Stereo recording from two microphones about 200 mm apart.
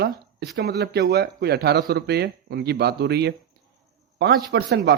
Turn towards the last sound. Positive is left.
turn(degrees=-60)  # may be behind; listen again after turning